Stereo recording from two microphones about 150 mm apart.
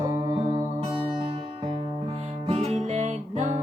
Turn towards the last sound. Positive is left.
turn(degrees=-50)  # may be behind; listen again after turning